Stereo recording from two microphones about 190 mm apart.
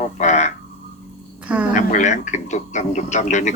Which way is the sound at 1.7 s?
40° left (ahead or behind).